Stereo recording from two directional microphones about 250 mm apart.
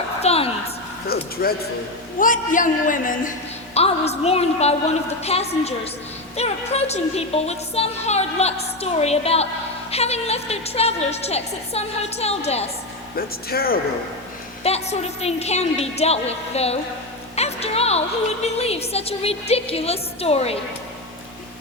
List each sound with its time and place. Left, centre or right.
0.2 s a sound: left
1.0 s a man's voice: left
13.1 s a man's voice: left
14.6 s a woman's voice: left
17.3 s music: left
18.4 s a woman's voice: left